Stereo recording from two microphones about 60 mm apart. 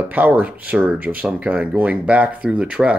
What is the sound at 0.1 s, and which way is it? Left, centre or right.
Speech, right.